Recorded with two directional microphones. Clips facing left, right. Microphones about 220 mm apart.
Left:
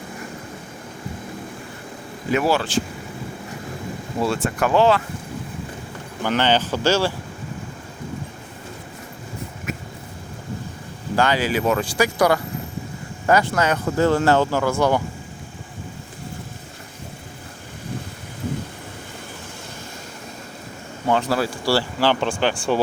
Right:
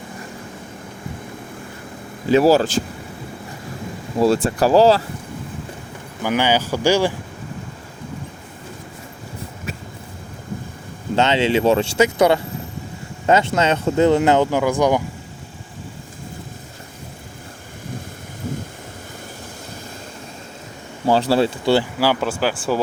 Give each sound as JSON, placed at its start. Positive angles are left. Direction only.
{"t": 2.3, "sound": "speech", "side_deg": -40}
{"t": 4.4, "sound": "speech", "side_deg": -35}
{"t": 6.2, "sound": "speech", "side_deg": -10}
{"t": 9.7, "sound": "a sound", "side_deg": -30}
{"t": 11.1, "sound": "speech", "side_deg": -25}
{"t": 21.1, "sound": "speech", "side_deg": -30}